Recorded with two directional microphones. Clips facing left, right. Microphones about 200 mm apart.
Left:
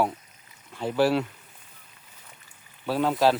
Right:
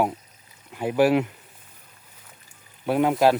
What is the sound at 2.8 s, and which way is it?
Speech, 20° right (ahead or behind).